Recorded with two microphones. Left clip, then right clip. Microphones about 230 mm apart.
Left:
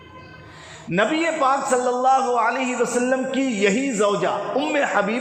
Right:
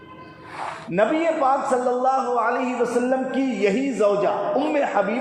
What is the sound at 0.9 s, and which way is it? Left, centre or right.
A man's voice, left.